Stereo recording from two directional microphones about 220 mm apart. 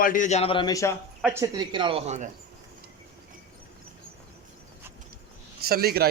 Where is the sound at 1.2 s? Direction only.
10° right (ahead or behind); by 2.2 s 30° right (ahead or behind).